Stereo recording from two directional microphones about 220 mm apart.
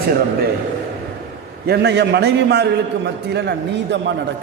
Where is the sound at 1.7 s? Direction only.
50° right (ahead or behind).